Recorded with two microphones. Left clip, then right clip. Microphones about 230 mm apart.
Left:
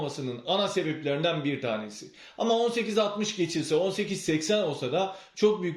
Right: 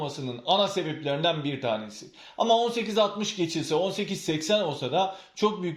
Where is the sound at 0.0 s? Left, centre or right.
Centre.